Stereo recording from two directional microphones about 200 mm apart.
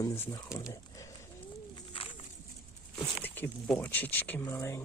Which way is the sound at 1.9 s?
25° left (ahead or behind).